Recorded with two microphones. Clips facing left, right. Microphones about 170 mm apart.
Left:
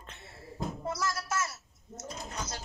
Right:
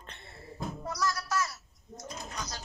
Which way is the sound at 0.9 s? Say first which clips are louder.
Right 2 dB; 25° left (ahead or behind).